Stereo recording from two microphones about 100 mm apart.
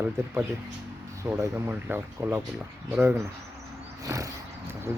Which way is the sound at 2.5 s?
10° right (ahead or behind).